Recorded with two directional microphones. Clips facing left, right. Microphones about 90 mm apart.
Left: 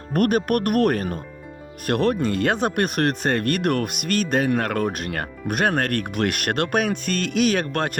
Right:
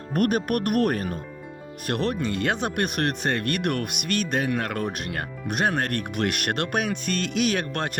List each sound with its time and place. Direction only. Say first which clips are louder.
0.1 s speech: left 3 dB; 55° left (ahead or behind)